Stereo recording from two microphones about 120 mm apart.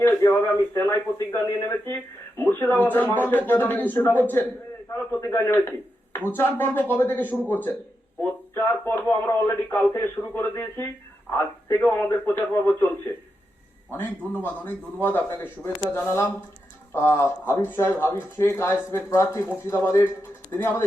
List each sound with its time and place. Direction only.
0.0 s a man's voice: 20° left (ahead or behind)
15.6 s speech: 25° left (ahead or behind)